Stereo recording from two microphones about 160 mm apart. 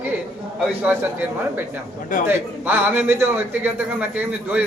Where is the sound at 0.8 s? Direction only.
10° right (ahead or behind).